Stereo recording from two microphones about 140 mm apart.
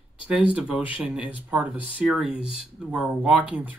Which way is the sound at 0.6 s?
10° right (ahead or behind).